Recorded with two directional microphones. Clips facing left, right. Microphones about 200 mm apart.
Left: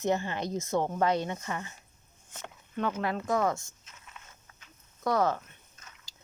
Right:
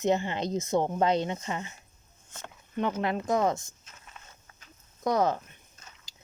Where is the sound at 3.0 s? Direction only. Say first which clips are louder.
Right 2 dB; 20° right (ahead or behind).